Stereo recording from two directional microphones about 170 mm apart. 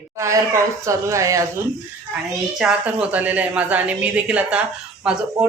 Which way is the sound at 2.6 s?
5° right (ahead or behind).